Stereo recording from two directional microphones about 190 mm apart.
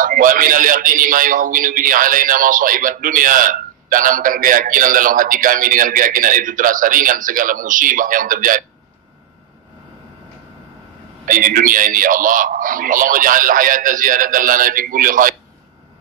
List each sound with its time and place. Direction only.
0.0 s a man's voice: 45° right (ahead or behind)
11.2 s a man's voice: 45° right (ahead or behind)